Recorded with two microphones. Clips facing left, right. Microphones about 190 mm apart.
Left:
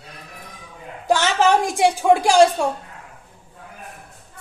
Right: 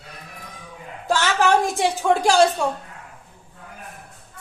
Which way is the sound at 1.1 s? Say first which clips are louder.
Left 2 dB; 20° left (ahead or behind).